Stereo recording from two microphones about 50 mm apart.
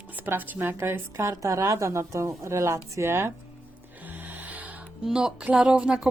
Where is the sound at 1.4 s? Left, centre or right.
Right.